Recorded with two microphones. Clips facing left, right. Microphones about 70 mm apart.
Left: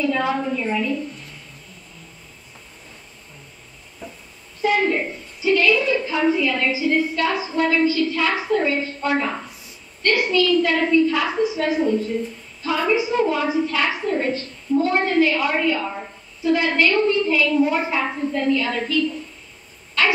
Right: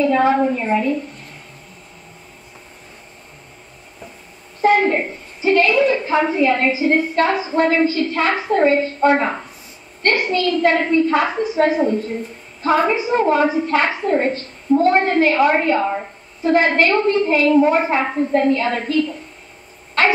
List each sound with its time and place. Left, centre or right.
0.0 s a woman's voice: right
4.6 s a woman's voice: right